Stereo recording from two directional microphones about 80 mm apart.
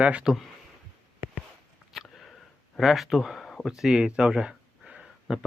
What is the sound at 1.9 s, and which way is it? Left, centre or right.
Sniff, centre.